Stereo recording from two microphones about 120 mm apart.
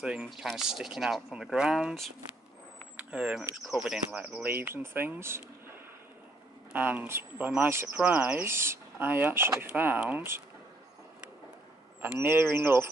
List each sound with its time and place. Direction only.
0.0 s speech: 10° right (ahead or behind)
6.7 s speech: 15° right (ahead or behind)
12.0 s speech: 15° right (ahead or behind)